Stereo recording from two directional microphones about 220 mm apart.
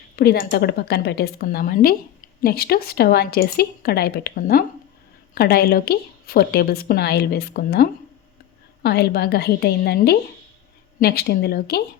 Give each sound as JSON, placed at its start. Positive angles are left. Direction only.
{"t": 0.2, "sound": "a woman's voice", "side_deg": 45}